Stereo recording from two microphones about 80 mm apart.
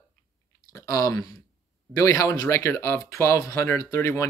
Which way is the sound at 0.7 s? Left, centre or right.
Left.